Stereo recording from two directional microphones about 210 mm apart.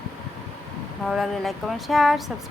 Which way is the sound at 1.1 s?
Centre (ahead or behind).